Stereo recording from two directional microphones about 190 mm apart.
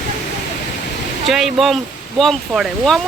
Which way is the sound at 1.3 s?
Centre (ahead or behind).